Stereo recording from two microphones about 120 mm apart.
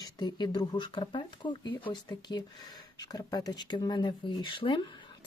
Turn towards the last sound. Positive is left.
turn(degrees=45)  # may be behind; listen again after turning